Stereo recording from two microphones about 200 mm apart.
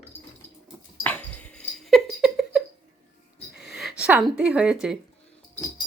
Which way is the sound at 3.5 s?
5° right (ahead or behind).